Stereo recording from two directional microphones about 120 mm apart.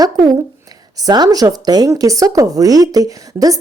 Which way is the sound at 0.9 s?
35° right (ahead or behind).